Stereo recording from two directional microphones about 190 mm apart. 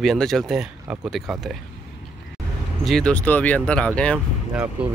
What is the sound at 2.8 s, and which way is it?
Speech, 5° left (ahead or behind).